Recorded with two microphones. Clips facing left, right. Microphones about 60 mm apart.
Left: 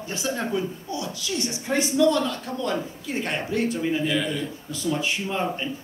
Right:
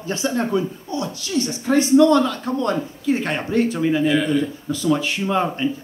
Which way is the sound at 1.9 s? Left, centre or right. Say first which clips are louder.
Right 7 dB; right.